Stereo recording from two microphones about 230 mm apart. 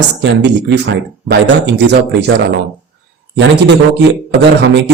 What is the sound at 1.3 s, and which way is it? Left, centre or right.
Speech, right.